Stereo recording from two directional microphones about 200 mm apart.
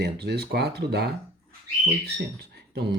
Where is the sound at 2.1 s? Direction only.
55° right (ahead or behind).